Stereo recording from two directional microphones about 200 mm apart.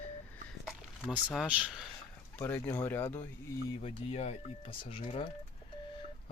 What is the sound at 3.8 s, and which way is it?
Speech, 30° left (ahead or behind).